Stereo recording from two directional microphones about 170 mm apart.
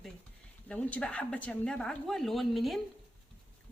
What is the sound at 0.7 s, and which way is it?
A woman's voice, 10° left (ahead or behind).